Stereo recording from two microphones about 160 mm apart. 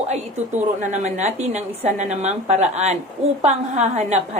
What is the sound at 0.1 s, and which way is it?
A woman's voice, 50° right (ahead or behind).